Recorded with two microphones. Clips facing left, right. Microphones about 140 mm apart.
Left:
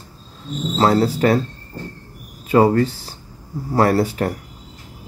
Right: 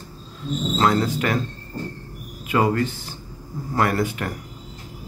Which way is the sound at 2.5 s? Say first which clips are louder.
Left 6 dB; 35° left (ahead or behind).